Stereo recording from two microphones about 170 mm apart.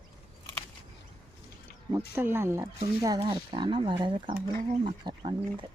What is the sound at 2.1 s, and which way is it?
Speech, 15° right (ahead or behind).